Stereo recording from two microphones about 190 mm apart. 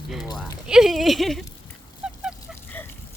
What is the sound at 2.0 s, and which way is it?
Goose, 5° right (ahead or behind).